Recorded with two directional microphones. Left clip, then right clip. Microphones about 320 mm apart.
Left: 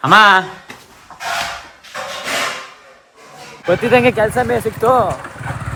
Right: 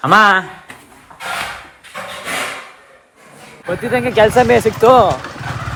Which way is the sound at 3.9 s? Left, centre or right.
Centre.